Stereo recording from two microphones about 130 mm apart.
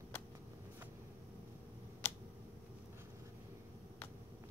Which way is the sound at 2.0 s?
20° left (ahead or behind).